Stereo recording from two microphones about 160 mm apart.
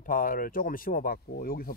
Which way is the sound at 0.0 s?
60° left (ahead or behind).